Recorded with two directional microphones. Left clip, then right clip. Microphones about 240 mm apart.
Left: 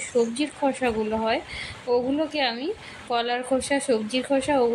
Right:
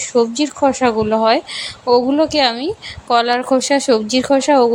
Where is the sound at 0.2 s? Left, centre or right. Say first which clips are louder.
Right 9 dB; right.